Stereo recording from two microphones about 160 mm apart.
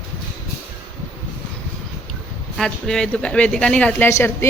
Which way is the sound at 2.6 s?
5° left (ahead or behind).